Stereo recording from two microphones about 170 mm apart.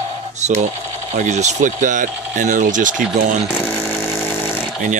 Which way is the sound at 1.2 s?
45° right (ahead or behind).